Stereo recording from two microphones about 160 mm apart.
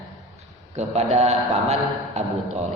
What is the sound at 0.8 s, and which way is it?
A man's voice, 45° right (ahead or behind).